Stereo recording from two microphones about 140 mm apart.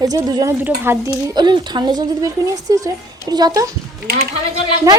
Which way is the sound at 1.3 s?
30° right (ahead or behind).